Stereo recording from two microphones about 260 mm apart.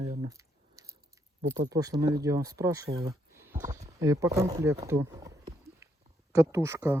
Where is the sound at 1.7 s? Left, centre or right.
Centre.